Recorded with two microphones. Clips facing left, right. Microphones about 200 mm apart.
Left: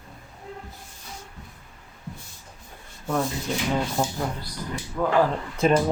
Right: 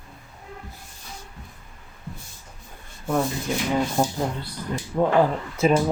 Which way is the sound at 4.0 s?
10° right (ahead or behind).